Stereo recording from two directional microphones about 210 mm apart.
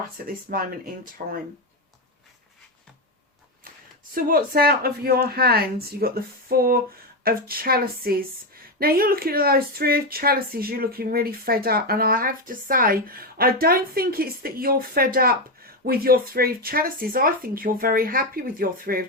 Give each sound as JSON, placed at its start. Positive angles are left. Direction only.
{"t": 0.3, "sound": "a woman's voice", "side_deg": -45}
{"t": 4.1, "sound": "a woman's voice", "side_deg": -45}